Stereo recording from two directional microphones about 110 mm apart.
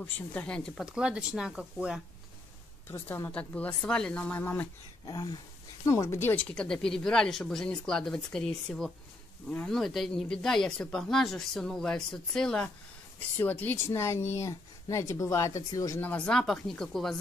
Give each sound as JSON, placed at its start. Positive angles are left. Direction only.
{"t": 0.0, "sound": "speech", "side_deg": 10}
{"t": 0.8, "sound": "speech", "side_deg": -10}
{"t": 2.9, "sound": "speech", "side_deg": 25}
{"t": 3.3, "sound": "speech", "side_deg": 10}
{"t": 5.0, "sound": "speech", "side_deg": 35}
{"t": 6.5, "sound": "speech", "side_deg": 5}
{"t": 16.0, "sound": "speech", "side_deg": 15}